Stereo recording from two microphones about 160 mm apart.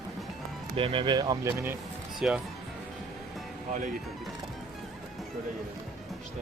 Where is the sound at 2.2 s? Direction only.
5° right (ahead or behind).